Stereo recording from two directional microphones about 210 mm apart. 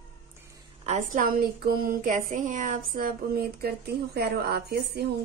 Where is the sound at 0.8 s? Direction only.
40° right (ahead or behind).